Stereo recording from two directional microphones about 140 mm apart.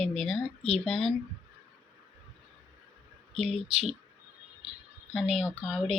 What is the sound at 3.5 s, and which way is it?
Speech, 5° right (ahead or behind).